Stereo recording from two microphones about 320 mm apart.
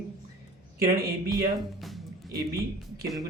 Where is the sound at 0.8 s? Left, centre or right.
Right.